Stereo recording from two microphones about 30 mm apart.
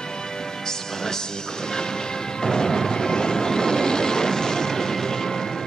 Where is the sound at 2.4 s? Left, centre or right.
Left.